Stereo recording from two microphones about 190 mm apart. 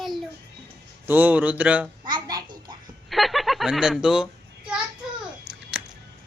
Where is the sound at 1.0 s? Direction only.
10° right (ahead or behind).